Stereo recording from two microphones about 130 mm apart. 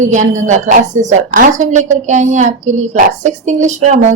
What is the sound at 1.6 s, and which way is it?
A woman's voice, 70° right (ahead or behind).